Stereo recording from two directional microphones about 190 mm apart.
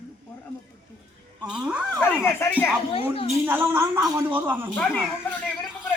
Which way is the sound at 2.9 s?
30° left (ahead or behind).